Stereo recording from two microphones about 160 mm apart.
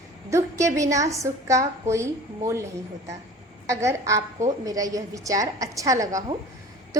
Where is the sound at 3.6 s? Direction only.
20° right (ahead or behind).